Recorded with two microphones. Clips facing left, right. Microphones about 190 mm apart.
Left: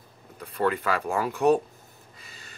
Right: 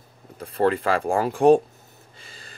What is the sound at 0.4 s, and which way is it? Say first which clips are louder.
Speech: right 5 dB; 30° right (ahead or behind).